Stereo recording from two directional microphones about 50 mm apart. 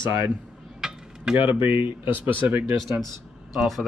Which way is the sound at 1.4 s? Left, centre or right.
Right.